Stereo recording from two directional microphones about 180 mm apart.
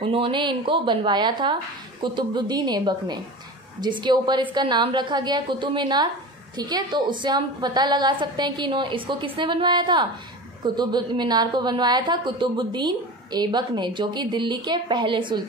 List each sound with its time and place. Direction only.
0.0 s a woman's voice: 30° right (ahead or behind)